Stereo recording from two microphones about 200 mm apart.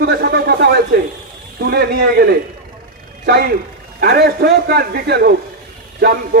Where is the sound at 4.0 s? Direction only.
50° right (ahead or behind).